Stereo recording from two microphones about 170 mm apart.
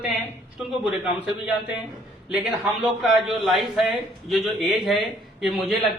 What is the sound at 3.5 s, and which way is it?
Speech, centre (ahead or behind).